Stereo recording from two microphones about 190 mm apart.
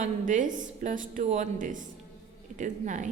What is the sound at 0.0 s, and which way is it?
A woman's voice, 40° right (ahead or behind).